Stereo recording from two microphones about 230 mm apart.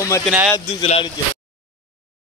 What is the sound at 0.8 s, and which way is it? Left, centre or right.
Speech, left.